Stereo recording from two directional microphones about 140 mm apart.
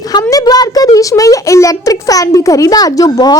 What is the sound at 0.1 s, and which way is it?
A child's voice, 25° left (ahead or behind).